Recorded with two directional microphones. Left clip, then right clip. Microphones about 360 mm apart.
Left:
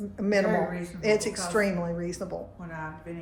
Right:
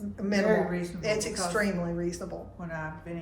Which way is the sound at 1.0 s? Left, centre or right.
Centre.